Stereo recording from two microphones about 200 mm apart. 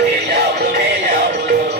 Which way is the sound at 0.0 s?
55° right (ahead or behind).